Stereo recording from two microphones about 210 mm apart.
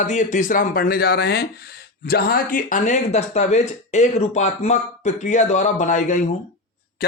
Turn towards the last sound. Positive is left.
turn(degrees=35)  # may be behind; listen again after turning